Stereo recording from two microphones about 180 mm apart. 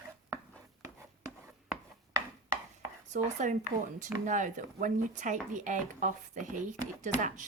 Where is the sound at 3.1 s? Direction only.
45° right (ahead or behind).